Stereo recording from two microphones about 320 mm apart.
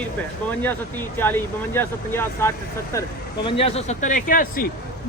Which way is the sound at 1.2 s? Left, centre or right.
Centre.